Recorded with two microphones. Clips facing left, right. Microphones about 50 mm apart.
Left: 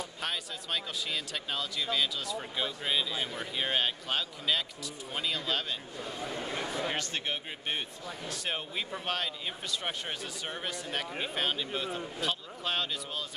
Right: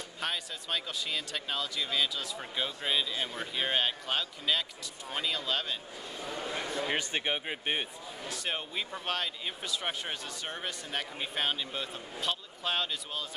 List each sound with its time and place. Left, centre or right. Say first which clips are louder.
0.2 s speech: right 3 dB; centre
6.9 s speech: right 2 dB; centre
8.3 s speech: right 1 dB; centre